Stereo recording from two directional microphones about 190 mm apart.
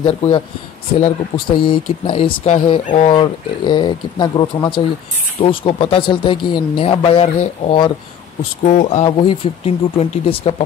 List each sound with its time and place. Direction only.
0.0 s speech: 30° left (ahead or behind)
1.6 s speech: 25° left (ahead or behind)
8.6 s speech: 40° left (ahead or behind)
9.0 s speech: 25° left (ahead or behind)